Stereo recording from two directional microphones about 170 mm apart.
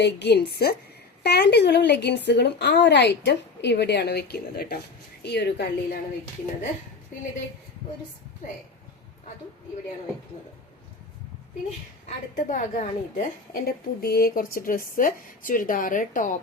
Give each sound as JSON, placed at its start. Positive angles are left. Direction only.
{"t": 0.0, "sound": "a woman's voice", "side_deg": 75}
{"t": 12.0, "sound": "a woman's voice", "side_deg": 45}